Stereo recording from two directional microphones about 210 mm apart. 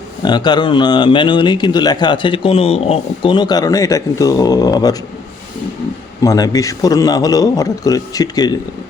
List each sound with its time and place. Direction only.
0.2 s speech: 20° left (ahead or behind)
6.2 s a man's voice: 15° left (ahead or behind)